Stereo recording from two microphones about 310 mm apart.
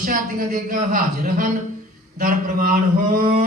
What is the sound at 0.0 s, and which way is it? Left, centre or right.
Speech, right.